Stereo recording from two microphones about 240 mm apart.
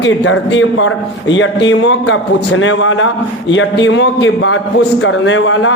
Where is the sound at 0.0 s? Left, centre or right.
Left.